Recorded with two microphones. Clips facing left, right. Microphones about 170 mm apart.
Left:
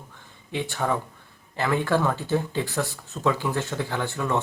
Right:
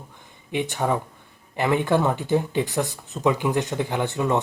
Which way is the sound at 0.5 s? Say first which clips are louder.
Right 3 dB; 15° right (ahead or behind).